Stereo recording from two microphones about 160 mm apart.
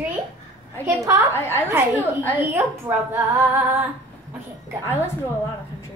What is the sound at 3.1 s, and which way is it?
Speech, 15° right (ahead or behind).